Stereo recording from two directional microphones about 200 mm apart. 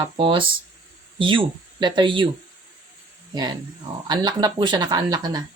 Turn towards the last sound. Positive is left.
turn(degrees=-20)  # may be behind; listen again after turning